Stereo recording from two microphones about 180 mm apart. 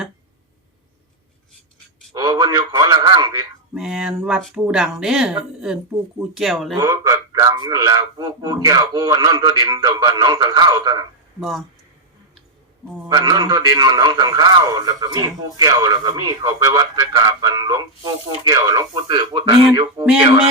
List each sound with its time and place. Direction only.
2.1 s a man's voice: 20° right (ahead or behind)
3.8 s speech: 5° right (ahead or behind)
6.7 s a man's voice: 20° right (ahead or behind)
11.3 s speech: centre (ahead or behind)
13.1 s a man's voice: 20° right (ahead or behind)